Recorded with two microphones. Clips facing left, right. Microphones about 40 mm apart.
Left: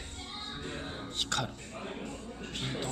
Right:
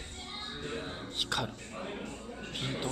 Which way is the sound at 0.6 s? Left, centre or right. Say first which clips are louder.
Right 3 dB; centre.